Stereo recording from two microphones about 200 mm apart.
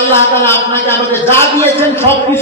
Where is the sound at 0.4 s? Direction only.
10° left (ahead or behind).